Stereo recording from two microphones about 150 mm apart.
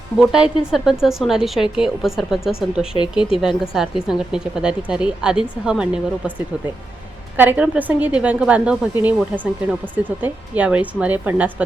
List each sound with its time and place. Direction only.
0.2 s speech: 5° right (ahead or behind)
2.9 s speech: 35° left (ahead or behind)
3.3 s speech: 5° right (ahead or behind)
7.3 s a woman's voice: 10° right (ahead or behind)